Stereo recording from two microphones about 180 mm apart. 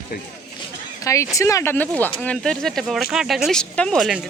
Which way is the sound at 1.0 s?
15° left (ahead or behind).